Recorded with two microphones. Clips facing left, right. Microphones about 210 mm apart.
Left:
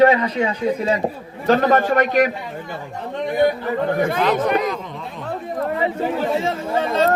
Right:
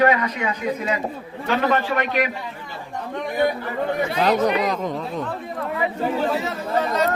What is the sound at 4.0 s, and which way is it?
Speech, 50° left (ahead or behind).